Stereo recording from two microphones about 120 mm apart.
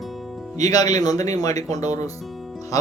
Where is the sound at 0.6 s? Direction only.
30° left (ahead or behind).